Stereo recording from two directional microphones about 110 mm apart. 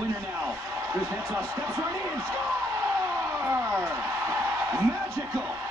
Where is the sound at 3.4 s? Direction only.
20° right (ahead or behind).